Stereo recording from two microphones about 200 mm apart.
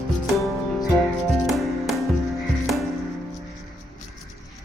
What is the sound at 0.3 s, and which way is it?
Music, centre (ahead or behind).